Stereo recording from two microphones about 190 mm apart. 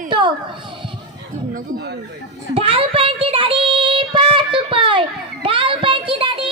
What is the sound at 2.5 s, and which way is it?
Child singing, 30° right (ahead or behind).